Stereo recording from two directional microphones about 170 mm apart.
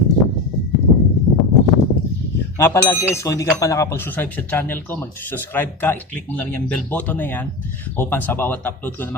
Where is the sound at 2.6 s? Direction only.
15° left (ahead or behind).